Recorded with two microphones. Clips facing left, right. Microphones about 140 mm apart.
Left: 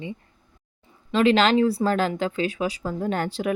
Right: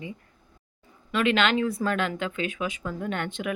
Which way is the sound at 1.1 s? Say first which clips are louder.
Left 5 dB; 30° left (ahead or behind).